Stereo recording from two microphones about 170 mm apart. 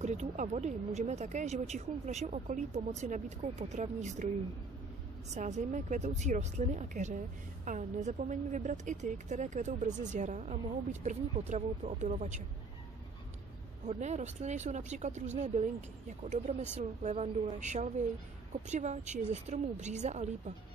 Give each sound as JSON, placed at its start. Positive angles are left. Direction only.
{"t": 0.0, "sound": "speech", "side_deg": -45}
{"t": 5.3, "sound": "speech", "side_deg": -45}
{"t": 13.8, "sound": "speech", "side_deg": -45}
{"t": 16.7, "sound": "speech", "side_deg": -40}